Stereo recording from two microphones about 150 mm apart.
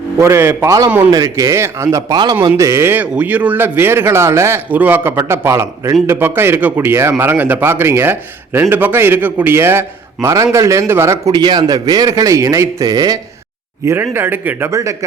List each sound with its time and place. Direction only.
0.2 s speech: 15° right (ahead or behind)
1.1 s a man's voice: 20° right (ahead or behind)